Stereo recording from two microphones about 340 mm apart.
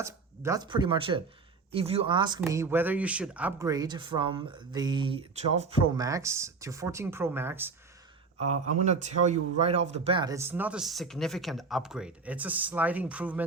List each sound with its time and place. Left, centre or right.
0.0 s speech: centre
8.7 s speech: centre